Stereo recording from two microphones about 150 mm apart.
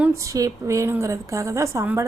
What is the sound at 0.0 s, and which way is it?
A woman's voice, 20° right (ahead or behind).